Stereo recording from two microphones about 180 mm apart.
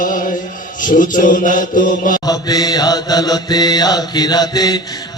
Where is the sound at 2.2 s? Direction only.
20° left (ahead or behind).